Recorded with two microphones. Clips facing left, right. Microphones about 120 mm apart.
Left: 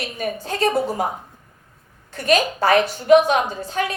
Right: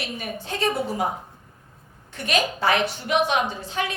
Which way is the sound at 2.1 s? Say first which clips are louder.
Left 6 dB; 40° left (ahead or behind).